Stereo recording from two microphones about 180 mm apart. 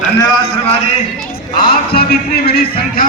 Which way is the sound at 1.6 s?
55° left (ahead or behind).